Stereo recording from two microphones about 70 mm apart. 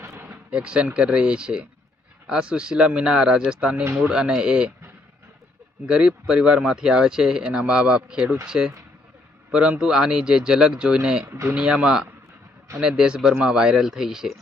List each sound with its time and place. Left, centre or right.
0.0 s a sound: right
0.3 s speech: centre
5.8 s speech: centre